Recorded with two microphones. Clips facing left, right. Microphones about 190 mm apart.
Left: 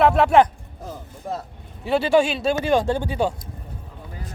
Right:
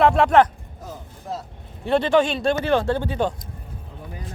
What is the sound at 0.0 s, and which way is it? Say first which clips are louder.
Speech: even; 5° left (ahead or behind).